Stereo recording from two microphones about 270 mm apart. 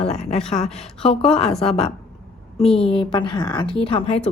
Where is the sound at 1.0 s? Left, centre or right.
Left.